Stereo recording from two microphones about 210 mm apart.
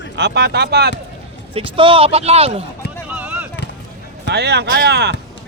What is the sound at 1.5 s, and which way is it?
A man's voice, 25° right (ahead or behind).